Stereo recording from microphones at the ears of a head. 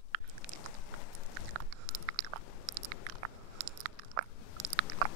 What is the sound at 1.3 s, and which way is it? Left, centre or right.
Biting, right.